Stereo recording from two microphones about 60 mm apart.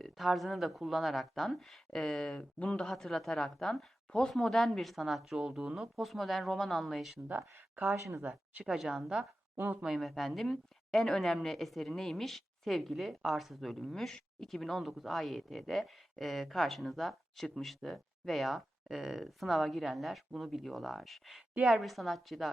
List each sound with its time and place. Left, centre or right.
0.0 s a woman's voice: centre
8.2 s speech: right
8.6 s a woman's voice: centre